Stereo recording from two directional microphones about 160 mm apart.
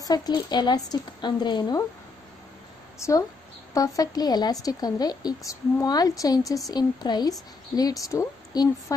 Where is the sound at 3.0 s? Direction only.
20° left (ahead or behind).